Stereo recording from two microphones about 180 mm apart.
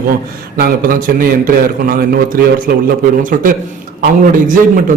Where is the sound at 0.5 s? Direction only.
55° right (ahead or behind).